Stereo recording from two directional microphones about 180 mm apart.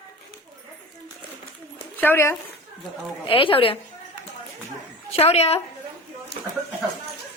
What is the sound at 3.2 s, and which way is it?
Speech, 30° left (ahead or behind).